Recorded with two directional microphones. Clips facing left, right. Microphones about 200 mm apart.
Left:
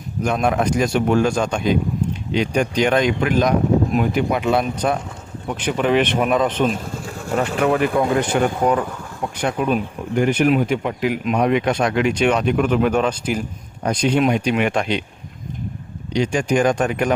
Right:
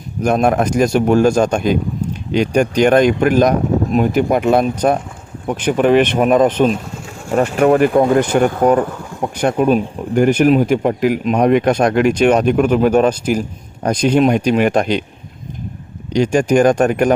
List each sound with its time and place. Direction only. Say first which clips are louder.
0.2 s speech: right 5 dB; 45° right (ahead or behind)
16.1 s speech: right 6 dB; 45° right (ahead or behind)